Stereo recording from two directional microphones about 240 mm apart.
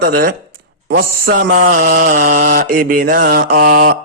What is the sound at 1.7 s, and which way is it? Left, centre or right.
Speech, right.